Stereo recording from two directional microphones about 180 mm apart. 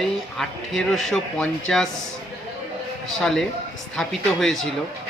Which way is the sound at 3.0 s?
Centre (ahead or behind).